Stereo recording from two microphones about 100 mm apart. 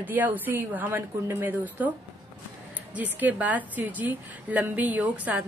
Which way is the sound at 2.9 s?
15° right (ahead or behind).